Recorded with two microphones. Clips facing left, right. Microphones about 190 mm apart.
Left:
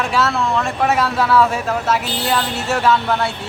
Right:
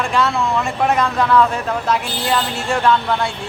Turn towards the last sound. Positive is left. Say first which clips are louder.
# even
turn(degrees=5)  # may be behind; listen again after turning